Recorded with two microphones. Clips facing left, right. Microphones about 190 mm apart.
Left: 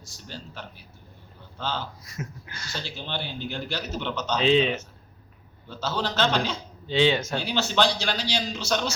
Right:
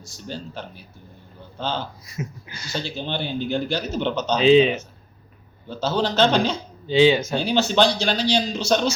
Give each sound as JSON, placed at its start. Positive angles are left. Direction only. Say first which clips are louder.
{"t": 1.5, "sound": "speech", "louder": "right 4 dB", "side_deg": -20}
{"t": 2.1, "sound": "speech", "louder": "right 5 dB", "side_deg": -5}
{"t": 2.7, "sound": "speech", "louder": "right 6 dB", "side_deg": -20}
{"t": 4.4, "sound": "speech", "louder": "right 6 dB", "side_deg": -5}
{"t": 5.6, "sound": "speech", "louder": "right 6 dB", "side_deg": -20}
{"t": 6.8, "sound": "speech", "louder": "right 6 dB", "side_deg": -5}
{"t": 7.3, "sound": "speech", "louder": "right 5 dB", "side_deg": -20}